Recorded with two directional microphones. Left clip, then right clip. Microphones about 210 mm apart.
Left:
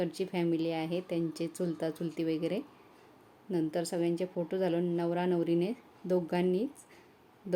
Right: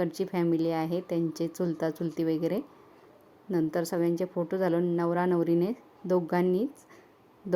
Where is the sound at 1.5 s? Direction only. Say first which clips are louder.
Right 4 dB; 15° right (ahead or behind).